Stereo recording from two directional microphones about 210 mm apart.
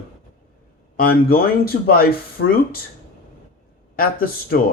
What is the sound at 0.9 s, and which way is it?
A man's voice, 45° left (ahead or behind).